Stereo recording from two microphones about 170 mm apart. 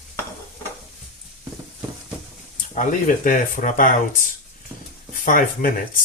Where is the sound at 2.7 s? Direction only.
50° left (ahead or behind).